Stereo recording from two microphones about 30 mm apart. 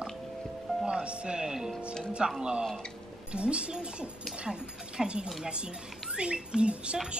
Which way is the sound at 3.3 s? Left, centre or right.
Right.